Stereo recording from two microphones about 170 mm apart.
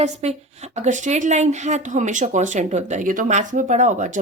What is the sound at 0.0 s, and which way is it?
Speech, 40° right (ahead or behind).